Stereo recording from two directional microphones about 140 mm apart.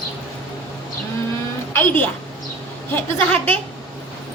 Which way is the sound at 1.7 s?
15° left (ahead or behind).